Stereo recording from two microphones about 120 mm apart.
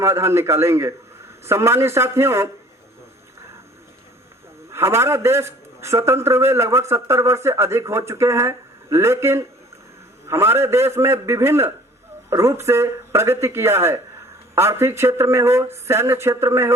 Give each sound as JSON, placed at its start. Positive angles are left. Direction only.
{"t": 0.0, "sound": "a man's voice", "side_deg": -25}
{"t": 4.7, "sound": "a man's voice", "side_deg": -25}